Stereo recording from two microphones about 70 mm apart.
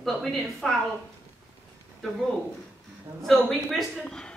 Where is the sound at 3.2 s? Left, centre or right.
Centre.